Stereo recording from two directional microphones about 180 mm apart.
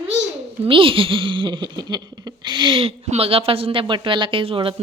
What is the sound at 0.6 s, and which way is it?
Speech, 30° right (ahead or behind).